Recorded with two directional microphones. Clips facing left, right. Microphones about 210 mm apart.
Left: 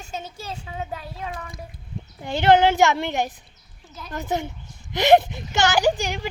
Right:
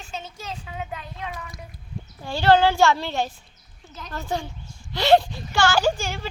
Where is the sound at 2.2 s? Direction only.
20° left (ahead or behind).